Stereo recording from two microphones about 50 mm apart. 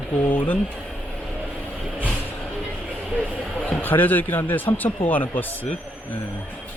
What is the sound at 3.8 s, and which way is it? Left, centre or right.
Speech, left.